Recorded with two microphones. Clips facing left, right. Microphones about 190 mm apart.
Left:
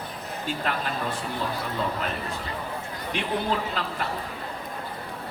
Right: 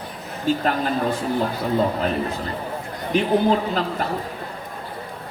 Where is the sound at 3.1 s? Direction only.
40° right (ahead or behind).